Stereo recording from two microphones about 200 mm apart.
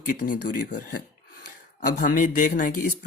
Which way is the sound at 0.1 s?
45° left (ahead or behind).